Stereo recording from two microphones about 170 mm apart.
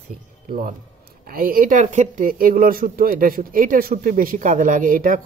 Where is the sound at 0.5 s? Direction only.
55° right (ahead or behind).